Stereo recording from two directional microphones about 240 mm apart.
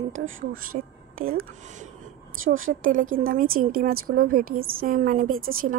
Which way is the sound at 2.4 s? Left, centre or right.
Right.